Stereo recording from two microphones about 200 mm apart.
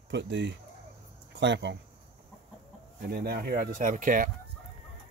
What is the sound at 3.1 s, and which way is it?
Speech, 50° right (ahead or behind).